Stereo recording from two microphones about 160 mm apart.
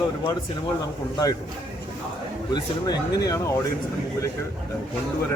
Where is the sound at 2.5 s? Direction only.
25° left (ahead or behind).